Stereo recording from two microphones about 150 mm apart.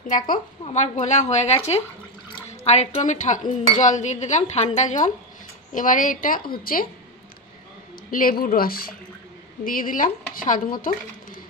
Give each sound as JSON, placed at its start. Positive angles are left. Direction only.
{"t": 0.0, "sound": "a woman's voice", "side_deg": 65}
{"t": 0.7, "sound": "a woman's voice", "side_deg": 50}
{"t": 8.1, "sound": "speech", "side_deg": 65}
{"t": 9.7, "sound": "a woman's voice", "side_deg": 65}